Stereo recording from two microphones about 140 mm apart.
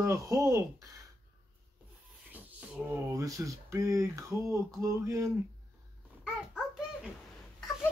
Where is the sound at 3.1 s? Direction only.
25° right (ahead or behind).